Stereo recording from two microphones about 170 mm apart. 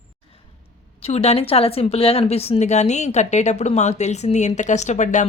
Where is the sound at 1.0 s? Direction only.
35° left (ahead or behind).